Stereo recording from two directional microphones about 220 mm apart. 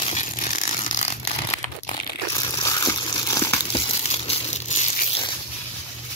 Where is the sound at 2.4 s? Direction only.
15° left (ahead or behind).